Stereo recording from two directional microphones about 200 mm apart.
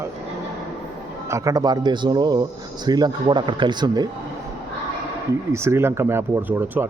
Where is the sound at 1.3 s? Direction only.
15° right (ahead or behind).